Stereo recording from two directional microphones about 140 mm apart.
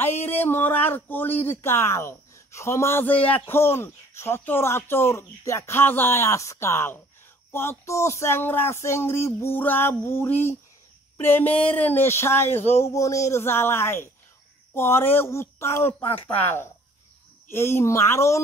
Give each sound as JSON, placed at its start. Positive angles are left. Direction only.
{"t": 0.0, "sound": "speech", "side_deg": 15}
{"t": 17.5, "sound": "speech", "side_deg": 15}